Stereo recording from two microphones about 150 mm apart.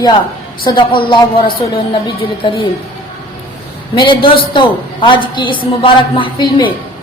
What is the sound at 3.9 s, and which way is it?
A woman's voice, 30° left (ahead or behind).